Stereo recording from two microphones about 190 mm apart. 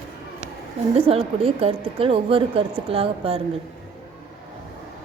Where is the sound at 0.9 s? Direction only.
30° right (ahead or behind).